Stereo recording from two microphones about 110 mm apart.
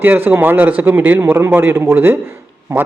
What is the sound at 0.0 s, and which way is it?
A man's voice, 20° right (ahead or behind).